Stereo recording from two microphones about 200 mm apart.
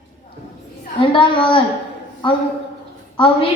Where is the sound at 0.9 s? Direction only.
25° left (ahead or behind).